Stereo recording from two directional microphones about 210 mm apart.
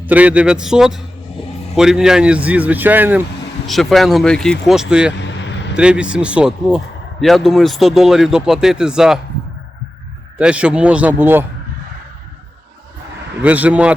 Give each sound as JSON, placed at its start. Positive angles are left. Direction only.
{"t": 0.0, "sound": "a man's voice", "side_deg": -5}
{"t": 5.1, "sound": "vehicle", "side_deg": 55}
{"t": 5.7, "sound": "speech", "side_deg": -5}
{"t": 10.3, "sound": "speech", "side_deg": -5}
{"t": 13.4, "sound": "a man's voice", "side_deg": -5}